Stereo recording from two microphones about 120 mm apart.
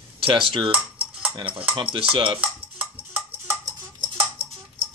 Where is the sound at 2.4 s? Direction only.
10° right (ahead or behind).